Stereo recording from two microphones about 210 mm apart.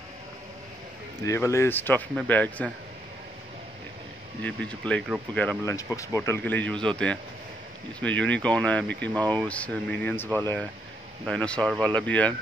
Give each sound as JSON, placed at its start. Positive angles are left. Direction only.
{"t": 1.2, "sound": "speech", "side_deg": 15}
{"t": 4.4, "sound": "speech", "side_deg": 5}
{"t": 8.0, "sound": "speech", "side_deg": 5}